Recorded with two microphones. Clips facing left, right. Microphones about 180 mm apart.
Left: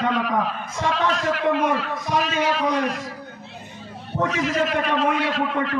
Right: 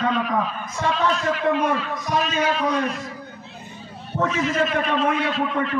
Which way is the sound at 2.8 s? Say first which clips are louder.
Left 1 dB; 65° left (ahead or behind).